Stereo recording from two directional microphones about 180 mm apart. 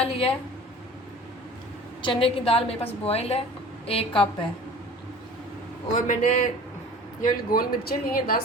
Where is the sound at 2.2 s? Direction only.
35° left (ahead or behind).